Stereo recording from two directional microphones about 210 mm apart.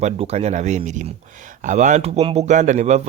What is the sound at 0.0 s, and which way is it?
A man's voice, 30° right (ahead or behind).